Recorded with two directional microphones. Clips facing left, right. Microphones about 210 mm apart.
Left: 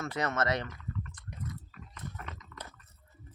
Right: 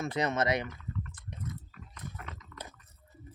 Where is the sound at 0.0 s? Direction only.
15° right (ahead or behind).